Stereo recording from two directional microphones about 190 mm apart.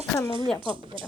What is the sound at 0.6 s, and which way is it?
Speech, 25° right (ahead or behind).